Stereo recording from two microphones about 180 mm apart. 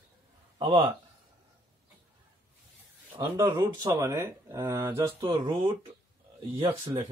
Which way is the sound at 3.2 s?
20° right (ahead or behind).